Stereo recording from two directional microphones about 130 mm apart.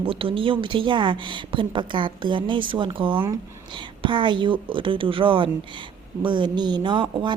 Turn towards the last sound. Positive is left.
turn(degrees=-40)  # may be behind; listen again after turning